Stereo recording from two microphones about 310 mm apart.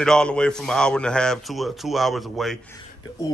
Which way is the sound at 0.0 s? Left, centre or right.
Centre.